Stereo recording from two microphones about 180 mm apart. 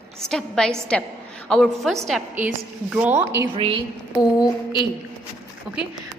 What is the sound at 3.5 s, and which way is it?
Speech, 30° right (ahead or behind).